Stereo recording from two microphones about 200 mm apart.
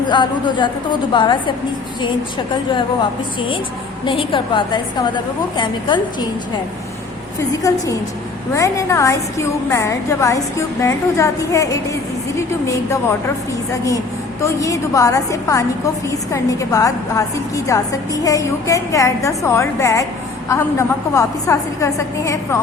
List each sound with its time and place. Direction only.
0.1 s a woman's voice: 25° left (ahead or behind)
4.0 s a woman's voice: 25° left (ahead or behind)
7.3 s a woman's voice: 15° left (ahead or behind)
14.4 s a woman's voice: 15° left (ahead or behind)